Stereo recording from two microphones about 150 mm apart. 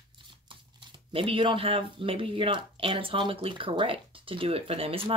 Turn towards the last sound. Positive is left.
turn(degrees=-40)  # may be behind; listen again after turning